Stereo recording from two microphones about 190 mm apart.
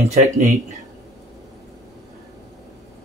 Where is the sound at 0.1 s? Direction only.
40° right (ahead or behind).